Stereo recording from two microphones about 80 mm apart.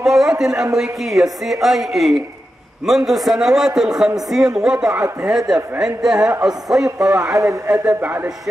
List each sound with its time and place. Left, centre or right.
0.0 s a sound: centre
0.7 s a woman's voice: centre
7.2 s speech: right
7.6 s a man's voice: right